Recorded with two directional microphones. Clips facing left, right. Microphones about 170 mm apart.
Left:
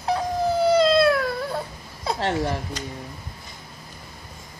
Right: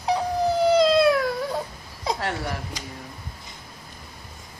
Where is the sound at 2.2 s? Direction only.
25° left (ahead or behind).